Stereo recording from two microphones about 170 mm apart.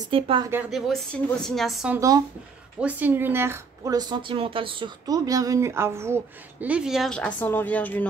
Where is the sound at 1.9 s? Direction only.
20° right (ahead or behind).